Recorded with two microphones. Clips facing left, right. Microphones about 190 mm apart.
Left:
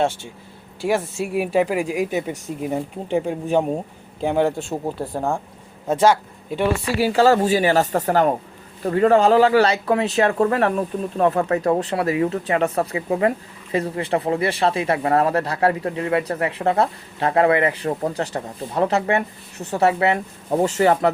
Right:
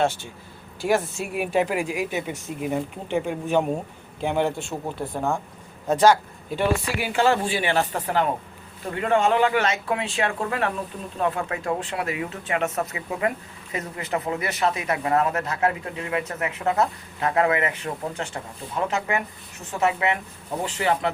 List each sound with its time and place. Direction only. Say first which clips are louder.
0.0 s speech: left 2 dB; 30° left (ahead or behind)
6.8 s speech: left 6 dB; 35° left (ahead or behind)